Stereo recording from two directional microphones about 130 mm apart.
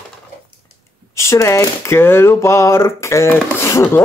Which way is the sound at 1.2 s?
20° left (ahead or behind).